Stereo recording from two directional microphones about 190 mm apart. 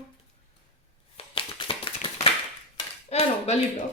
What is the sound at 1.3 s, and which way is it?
Tap, 25° left (ahead or behind).